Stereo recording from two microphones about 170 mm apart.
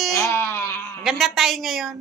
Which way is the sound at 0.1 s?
15° left (ahead or behind).